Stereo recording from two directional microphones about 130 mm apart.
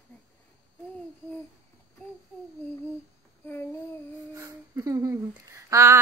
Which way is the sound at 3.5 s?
20° left (ahead or behind).